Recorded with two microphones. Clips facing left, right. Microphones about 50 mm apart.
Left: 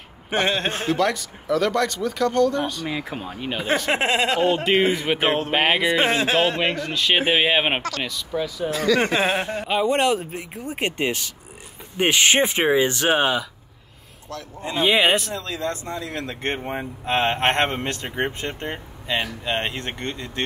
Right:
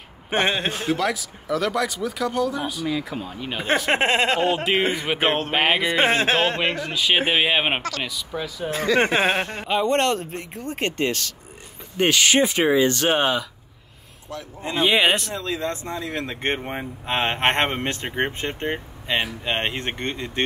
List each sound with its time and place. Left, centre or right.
0.3 s a man's voice: right
0.9 s speech: centre
2.9 s speech: left
3.9 s speech: right
4.9 s speech: centre
5.9 s speech: right
6.6 s speech: centre
8.6 s speech: right
9.3 s speech: centre
9.7 s speech: centre
12.1 s speech: left; by 13.5 s centre
14.8 s speech: centre
15.3 s speech: right